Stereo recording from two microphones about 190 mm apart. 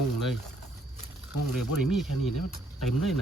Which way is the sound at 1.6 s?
Centre (ahead or behind).